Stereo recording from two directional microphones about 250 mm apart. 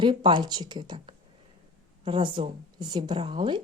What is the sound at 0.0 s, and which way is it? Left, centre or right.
Speech, centre.